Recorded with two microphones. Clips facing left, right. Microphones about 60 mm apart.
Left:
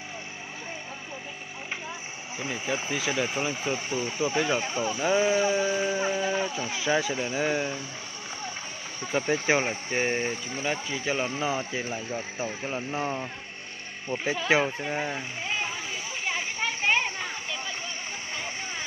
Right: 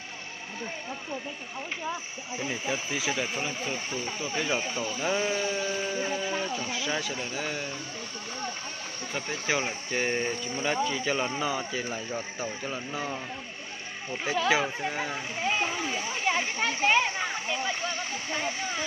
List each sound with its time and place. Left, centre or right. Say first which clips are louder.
2.3 s speech: right 1 dB; left
2.6 s speech: left 4 dB; centre
3.3 s speech: left 3 dB; centre
9.0 s speech: left 7 dB; centre
14.5 s speech: left 4 dB; left
14.9 s speech: left 2 dB; left
16.3 s a sound: right 2 dB; centre